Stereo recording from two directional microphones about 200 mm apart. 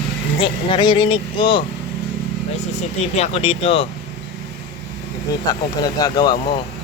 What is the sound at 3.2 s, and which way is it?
Speech, 30° left (ahead or behind).